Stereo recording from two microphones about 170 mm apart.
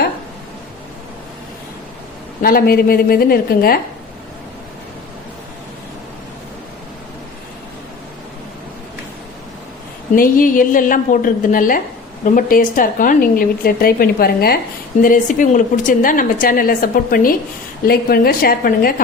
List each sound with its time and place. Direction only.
2.4 s a woman's voice: 60° left (ahead or behind)
10.2 s a woman's voice: 55° left (ahead or behind)
15.0 s a woman's voice: 50° left (ahead or behind)